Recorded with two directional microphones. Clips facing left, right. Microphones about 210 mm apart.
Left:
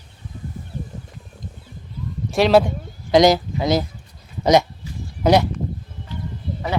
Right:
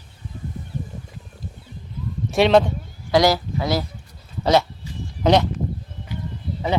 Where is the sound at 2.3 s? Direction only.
5° left (ahead or behind).